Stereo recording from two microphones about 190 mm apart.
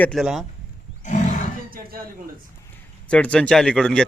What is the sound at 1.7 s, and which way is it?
Speech, 50° right (ahead or behind).